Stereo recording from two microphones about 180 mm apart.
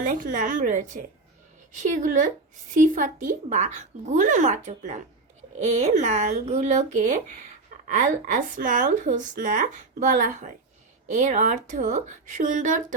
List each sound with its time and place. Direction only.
0.0 s a woman's voice: 45° right (ahead or behind)